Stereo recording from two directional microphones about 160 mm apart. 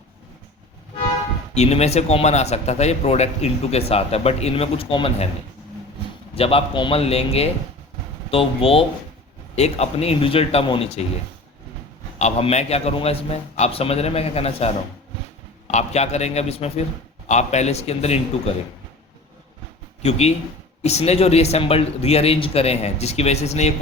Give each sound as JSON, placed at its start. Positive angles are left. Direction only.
{"t": 1.5, "sound": "a man's voice", "side_deg": 40}
{"t": 6.3, "sound": "a man's voice", "side_deg": 35}
{"t": 12.2, "sound": "a man's voice", "side_deg": 45}
{"t": 20.0, "sound": "a man's voice", "side_deg": 40}